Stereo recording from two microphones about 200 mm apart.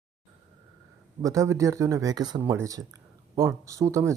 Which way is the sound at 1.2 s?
15° right (ahead or behind).